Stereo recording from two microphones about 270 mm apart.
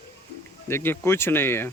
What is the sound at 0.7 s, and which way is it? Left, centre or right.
Speech, centre.